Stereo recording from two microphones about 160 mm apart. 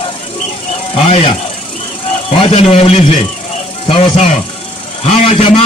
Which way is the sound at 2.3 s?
35° left (ahead or behind).